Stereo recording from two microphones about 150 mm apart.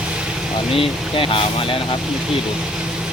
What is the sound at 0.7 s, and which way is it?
Speech, 35° left (ahead or behind).